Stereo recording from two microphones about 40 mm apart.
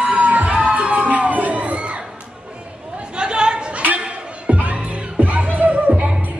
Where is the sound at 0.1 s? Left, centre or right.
Right.